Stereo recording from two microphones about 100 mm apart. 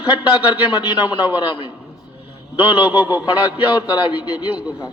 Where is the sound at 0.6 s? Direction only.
45° left (ahead or behind).